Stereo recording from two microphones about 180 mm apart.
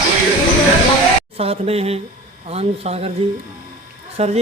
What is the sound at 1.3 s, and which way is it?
Speech, 35° right (ahead or behind).